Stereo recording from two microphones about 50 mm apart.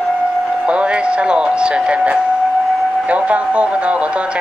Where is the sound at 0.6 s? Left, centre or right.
Right.